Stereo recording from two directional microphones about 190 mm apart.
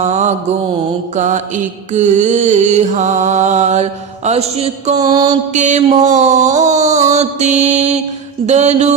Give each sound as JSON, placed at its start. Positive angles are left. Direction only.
{"t": 0.0, "sound": "mantra", "side_deg": -35}
{"t": 4.9, "sound": "music", "side_deg": -20}
{"t": 5.5, "sound": "mantra", "side_deg": -40}